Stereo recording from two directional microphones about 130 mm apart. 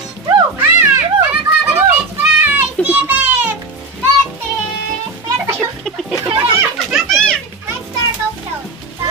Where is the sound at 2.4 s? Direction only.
15° right (ahead or behind).